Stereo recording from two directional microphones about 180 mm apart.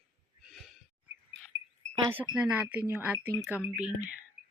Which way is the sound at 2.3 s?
10° right (ahead or behind).